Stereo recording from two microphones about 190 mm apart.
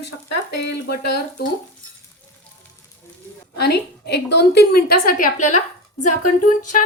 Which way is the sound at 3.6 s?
60° left (ahead or behind).